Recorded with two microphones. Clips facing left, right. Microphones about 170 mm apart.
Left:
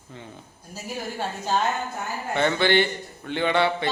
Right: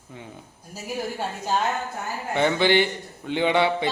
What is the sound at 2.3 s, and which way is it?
Speech, 15° right (ahead or behind).